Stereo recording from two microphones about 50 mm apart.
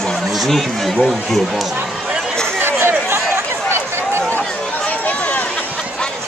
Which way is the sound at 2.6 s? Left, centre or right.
Right.